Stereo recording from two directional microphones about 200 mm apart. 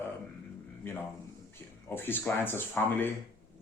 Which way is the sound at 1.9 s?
10° left (ahead or behind).